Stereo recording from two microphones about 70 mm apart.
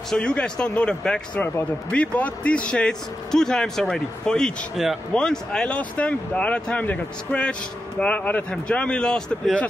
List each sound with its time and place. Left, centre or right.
0.2 s speech: centre
4.8 s speech: centre
5.1 s speech: centre